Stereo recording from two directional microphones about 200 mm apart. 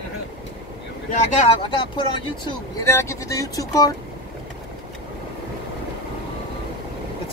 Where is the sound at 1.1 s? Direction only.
30° left (ahead or behind).